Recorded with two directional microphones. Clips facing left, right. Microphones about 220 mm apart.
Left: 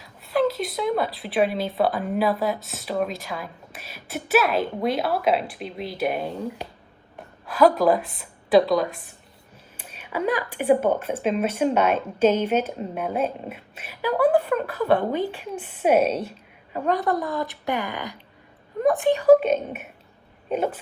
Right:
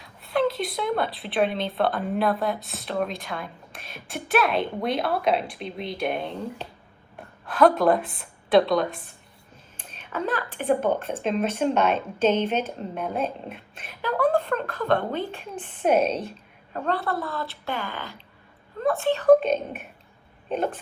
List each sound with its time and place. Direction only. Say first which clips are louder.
0.0 s a woman's voice: left 2 dB; centre (ahead or behind)